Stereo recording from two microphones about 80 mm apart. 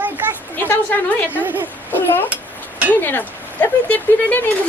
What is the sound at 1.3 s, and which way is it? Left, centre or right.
Speech, right.